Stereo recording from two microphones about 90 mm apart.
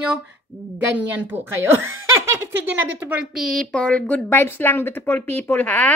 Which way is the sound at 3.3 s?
5° left (ahead or behind).